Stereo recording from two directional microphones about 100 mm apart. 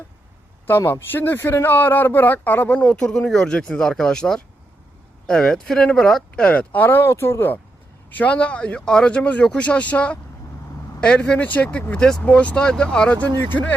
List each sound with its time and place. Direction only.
0.7 s speech: 25° left (ahead or behind)